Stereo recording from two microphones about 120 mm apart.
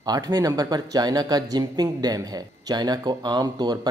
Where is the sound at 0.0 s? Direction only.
35° right (ahead or behind).